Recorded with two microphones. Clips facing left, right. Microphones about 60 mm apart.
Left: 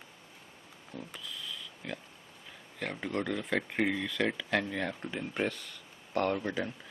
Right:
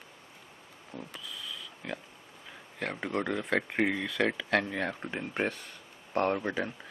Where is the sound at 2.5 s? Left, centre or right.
Centre.